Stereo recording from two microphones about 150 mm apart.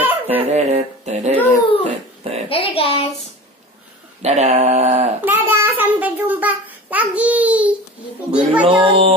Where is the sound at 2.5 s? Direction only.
40° left (ahead or behind).